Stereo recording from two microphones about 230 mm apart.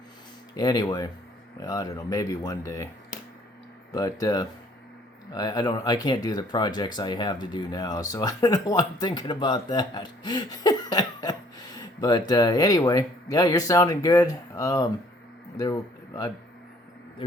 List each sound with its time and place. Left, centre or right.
0.5 s speech: centre
3.9 s a man's voice: centre